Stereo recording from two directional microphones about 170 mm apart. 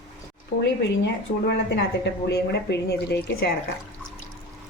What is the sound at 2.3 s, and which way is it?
Speech, 75° left (ahead or behind).